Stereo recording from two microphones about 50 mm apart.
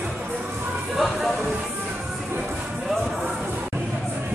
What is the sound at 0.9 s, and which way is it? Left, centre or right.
Music, centre.